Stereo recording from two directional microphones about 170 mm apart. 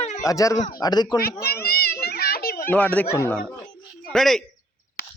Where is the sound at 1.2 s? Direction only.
65° left (ahead or behind).